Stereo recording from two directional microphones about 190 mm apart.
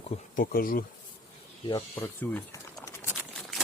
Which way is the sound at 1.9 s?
10° left (ahead or behind).